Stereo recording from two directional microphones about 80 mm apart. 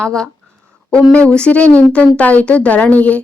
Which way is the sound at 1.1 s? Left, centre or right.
Centre.